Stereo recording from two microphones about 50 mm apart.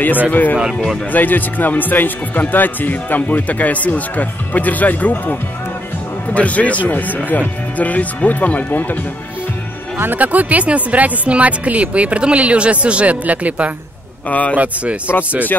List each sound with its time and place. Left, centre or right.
0.3 s speech: left
10.1 s speech: right